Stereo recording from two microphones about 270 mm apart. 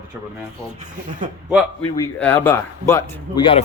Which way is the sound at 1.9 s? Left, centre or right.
Centre.